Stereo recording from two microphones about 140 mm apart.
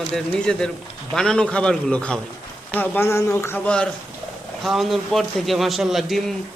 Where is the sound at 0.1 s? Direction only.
5° left (ahead or behind).